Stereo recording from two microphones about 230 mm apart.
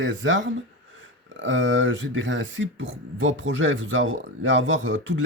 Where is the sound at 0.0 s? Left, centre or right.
Right.